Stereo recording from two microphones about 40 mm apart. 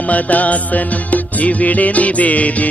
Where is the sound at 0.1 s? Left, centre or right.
Left.